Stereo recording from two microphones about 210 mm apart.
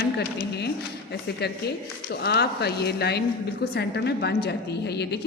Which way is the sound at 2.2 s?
50° left (ahead or behind).